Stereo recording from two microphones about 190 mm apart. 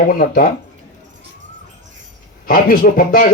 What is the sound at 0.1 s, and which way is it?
Speech, 50° left (ahead or behind).